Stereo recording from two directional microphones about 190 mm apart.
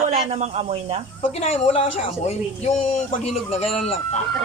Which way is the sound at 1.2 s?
35° left (ahead or behind).